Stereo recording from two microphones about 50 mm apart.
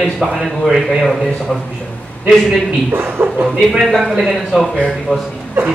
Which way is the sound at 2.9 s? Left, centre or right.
Right.